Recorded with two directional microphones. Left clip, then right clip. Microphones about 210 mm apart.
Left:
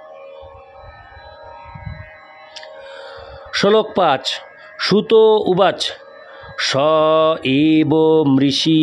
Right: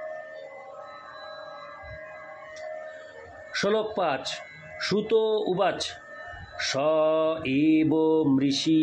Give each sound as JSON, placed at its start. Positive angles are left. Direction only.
{"t": 3.5, "sound": "speech", "side_deg": 45}